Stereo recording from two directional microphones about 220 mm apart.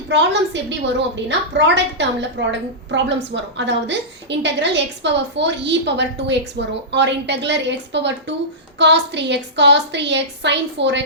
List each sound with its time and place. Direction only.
0.1 s a woman's voice: 55° right (ahead or behind)